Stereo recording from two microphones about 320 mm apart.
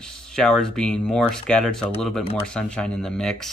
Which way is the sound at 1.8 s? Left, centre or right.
Centre.